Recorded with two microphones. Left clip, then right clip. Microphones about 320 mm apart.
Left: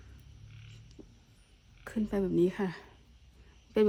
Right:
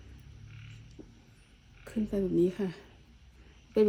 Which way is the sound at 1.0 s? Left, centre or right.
Centre.